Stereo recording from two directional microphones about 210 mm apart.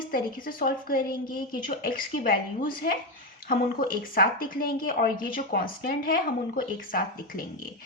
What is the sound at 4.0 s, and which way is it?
A woman's voice, 40° left (ahead or behind).